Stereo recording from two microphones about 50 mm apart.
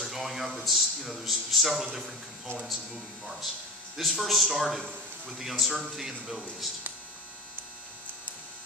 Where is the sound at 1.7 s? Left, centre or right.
Centre.